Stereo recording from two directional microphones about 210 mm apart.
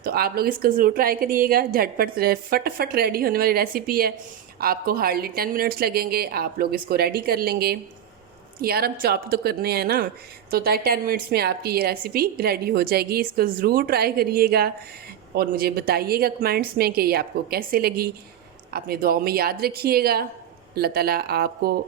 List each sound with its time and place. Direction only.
0.0 s a woman's voice: 45° right (ahead or behind)